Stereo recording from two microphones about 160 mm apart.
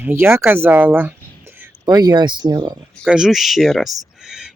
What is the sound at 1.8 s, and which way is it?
Speech, 20° right (ahead or behind).